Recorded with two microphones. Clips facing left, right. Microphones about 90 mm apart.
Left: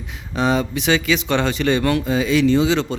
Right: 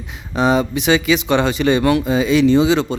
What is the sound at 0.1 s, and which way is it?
Speech, 20° right (ahead or behind).